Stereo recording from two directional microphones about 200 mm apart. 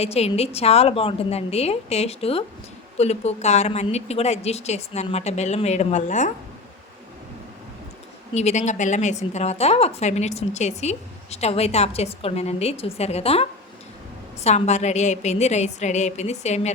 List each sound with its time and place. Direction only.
0.0 s a woman's voice: 30° left (ahead or behind)
8.3 s a woman's voice: 35° left (ahead or behind)